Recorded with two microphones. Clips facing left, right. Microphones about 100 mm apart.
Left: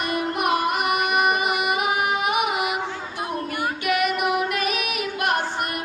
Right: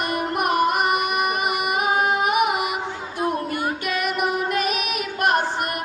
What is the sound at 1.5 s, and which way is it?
Carnatic music, 45° right (ahead or behind).